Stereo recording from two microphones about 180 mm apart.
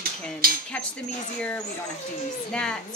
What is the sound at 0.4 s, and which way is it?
Speech, 55° right (ahead or behind).